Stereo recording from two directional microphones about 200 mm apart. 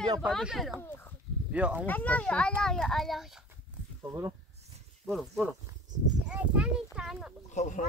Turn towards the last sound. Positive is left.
turn(degrees=35)  # may be behind; listen again after turning